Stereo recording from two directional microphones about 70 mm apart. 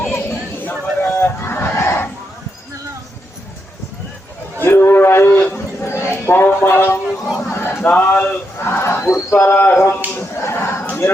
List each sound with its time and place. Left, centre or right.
0.1 s chatter: left
1.1 s fowl: left
4.6 s a sound: left
5.8 s speech: left
7.3 s a sound: left
7.9 s speech: left
8.5 s speech: left
9.5 s speech: left
10.2 s a sound: left